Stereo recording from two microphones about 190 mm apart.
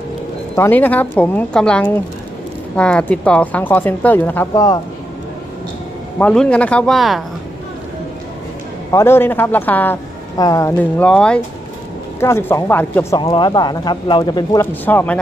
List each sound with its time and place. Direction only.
0.6 s speech: 10° left (ahead or behind)
6.1 s speech: 5° left (ahead or behind)
8.9 s speech: 10° left (ahead or behind)
10.8 s speech: 5° left (ahead or behind)
13.2 s speech: 25° left (ahead or behind)
14.7 s speech: 10° left (ahead or behind)